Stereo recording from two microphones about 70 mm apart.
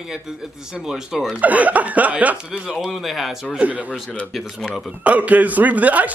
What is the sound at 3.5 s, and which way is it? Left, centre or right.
Speech, right.